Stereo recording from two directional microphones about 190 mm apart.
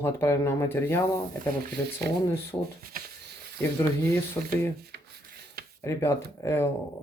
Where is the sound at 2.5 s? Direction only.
20° left (ahead or behind).